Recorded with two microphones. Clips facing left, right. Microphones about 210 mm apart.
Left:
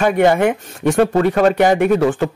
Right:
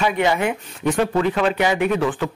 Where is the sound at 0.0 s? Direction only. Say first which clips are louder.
Left 6 dB; 50° left (ahead or behind).